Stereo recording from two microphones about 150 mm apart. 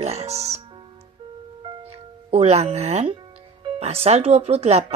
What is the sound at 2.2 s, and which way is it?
Speech, 45° right (ahead or behind).